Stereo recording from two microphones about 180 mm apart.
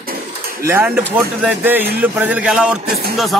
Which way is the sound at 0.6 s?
15° right (ahead or behind).